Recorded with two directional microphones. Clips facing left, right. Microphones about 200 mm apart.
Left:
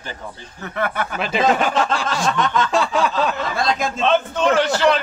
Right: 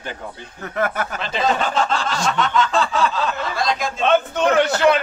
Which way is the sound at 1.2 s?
10° left (ahead or behind).